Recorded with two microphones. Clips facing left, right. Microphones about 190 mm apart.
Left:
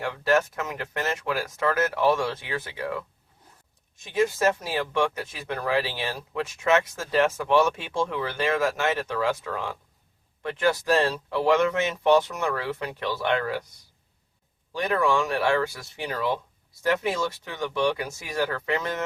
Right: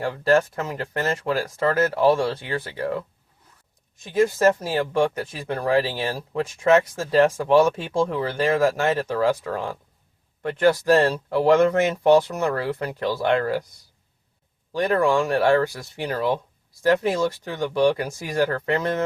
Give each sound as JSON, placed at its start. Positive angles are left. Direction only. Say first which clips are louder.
{"t": 0.0, "sound": "speech", "louder": "right 4 dB", "side_deg": -35}
{"t": 4.1, "sound": "speech", "louder": "right 4 dB", "side_deg": -40}
{"t": 14.7, "sound": "speech", "louder": "right 4 dB", "side_deg": -35}